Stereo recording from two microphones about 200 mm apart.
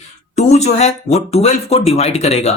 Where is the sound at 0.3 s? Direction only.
35° left (ahead or behind).